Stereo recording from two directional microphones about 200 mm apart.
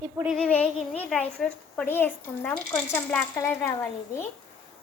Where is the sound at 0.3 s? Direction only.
5° left (ahead or behind).